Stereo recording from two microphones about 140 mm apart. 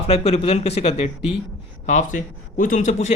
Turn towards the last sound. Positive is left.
turn(degrees=55)  # may be behind; listen again after turning